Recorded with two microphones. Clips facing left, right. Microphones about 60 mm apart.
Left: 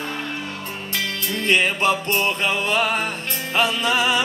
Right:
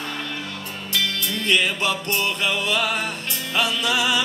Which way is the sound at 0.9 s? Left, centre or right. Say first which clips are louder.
Right 1 dB; left.